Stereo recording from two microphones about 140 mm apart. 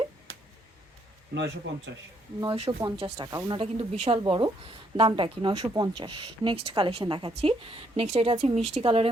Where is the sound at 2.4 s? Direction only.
40° right (ahead or behind).